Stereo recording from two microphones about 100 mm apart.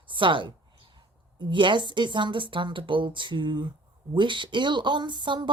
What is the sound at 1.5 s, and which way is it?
Speech, 55° right (ahead or behind).